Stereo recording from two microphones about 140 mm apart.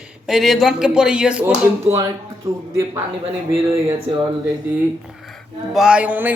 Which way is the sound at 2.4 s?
20° right (ahead or behind).